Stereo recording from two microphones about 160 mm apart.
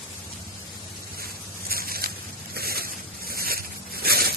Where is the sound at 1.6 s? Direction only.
70° right (ahead or behind).